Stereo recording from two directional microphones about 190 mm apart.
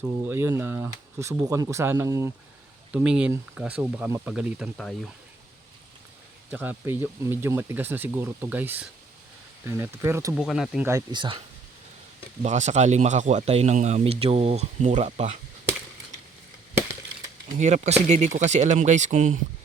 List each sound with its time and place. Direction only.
0.3 s speech: 15° right (ahead or behind)
6.5 s speech: 10° right (ahead or behind)
10.3 s speech: centre (ahead or behind)
10.8 s speech: 20° right (ahead or behind)
12.4 s speech: 40° right (ahead or behind)
17.5 s speech: 35° right (ahead or behind)